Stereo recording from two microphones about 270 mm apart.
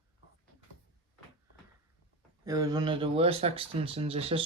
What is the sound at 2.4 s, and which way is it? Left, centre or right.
Speech, centre.